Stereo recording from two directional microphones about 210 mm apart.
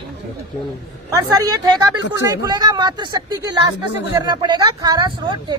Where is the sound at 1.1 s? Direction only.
15° right (ahead or behind).